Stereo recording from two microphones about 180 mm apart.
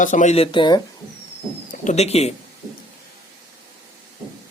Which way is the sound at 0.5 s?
25° left (ahead or behind).